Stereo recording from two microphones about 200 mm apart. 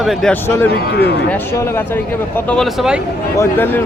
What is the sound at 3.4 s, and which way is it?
Speech, 10° left (ahead or behind).